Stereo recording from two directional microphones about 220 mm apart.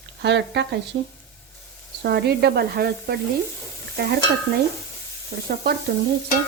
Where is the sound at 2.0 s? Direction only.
45° right (ahead or behind).